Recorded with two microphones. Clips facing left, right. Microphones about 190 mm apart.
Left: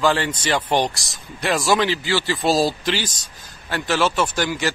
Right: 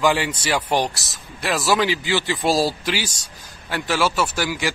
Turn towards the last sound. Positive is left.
turn(degrees=-10)  # may be behind; listen again after turning